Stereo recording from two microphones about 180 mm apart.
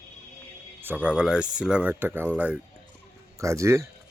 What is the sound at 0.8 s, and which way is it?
Speech, 10° right (ahead or behind).